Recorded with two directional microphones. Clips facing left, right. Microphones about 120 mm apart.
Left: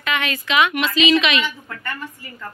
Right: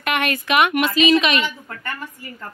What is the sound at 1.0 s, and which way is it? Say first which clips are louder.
Speech: even; 40° right (ahead or behind).